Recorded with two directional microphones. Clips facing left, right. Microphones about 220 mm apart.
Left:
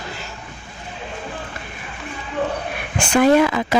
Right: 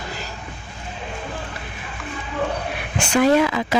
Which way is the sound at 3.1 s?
50° left (ahead or behind).